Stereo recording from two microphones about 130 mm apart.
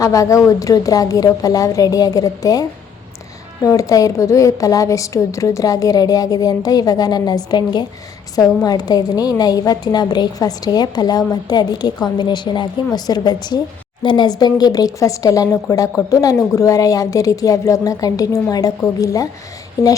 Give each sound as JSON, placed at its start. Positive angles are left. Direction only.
{"t": 0.0, "sound": "a woman's voice", "side_deg": 25}